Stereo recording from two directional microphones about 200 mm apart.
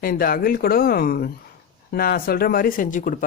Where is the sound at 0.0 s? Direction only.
45° left (ahead or behind).